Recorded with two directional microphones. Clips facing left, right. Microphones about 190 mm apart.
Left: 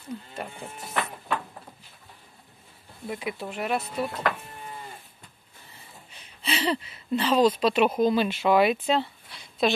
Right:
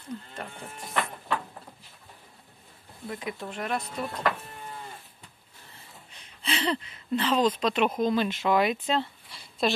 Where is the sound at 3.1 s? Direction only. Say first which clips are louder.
Left 3 dB; 10° left (ahead or behind).